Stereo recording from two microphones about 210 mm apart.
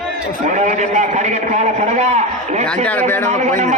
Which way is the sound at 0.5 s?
35° right (ahead or behind).